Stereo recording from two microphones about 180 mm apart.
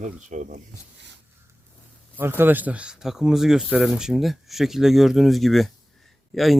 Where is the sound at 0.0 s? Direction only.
45° right (ahead or behind).